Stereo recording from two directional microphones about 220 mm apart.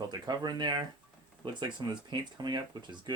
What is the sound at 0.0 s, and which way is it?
Speech, 20° right (ahead or behind).